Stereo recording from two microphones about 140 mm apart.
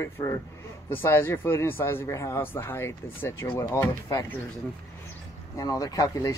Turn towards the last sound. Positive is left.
turn(degrees=25)  # may be behind; listen again after turning